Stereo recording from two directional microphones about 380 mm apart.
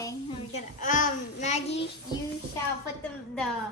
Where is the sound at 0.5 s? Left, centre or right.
Centre.